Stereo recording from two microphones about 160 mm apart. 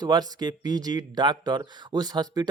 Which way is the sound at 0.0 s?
25° right (ahead or behind).